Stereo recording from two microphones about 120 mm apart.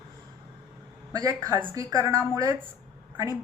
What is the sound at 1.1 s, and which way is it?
A woman's voice, 30° right (ahead or behind).